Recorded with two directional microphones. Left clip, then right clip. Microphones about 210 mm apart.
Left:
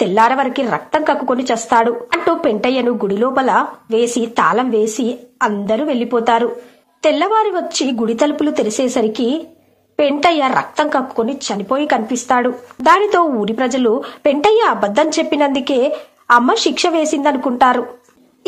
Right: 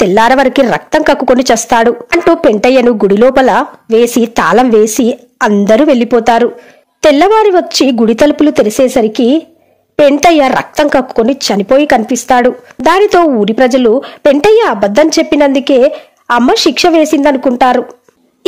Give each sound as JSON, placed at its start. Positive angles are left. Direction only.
{"t": 0.0, "sound": "a woman's voice", "side_deg": -50}